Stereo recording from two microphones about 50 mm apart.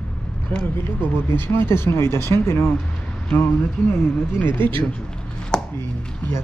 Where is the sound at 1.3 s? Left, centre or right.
Left.